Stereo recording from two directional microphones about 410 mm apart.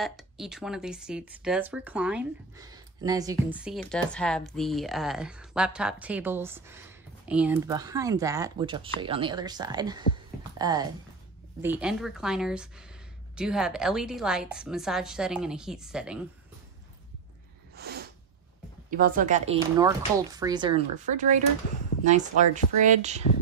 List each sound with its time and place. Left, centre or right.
0.0 s speech: centre
17.7 s snort: right
18.9 s speech: centre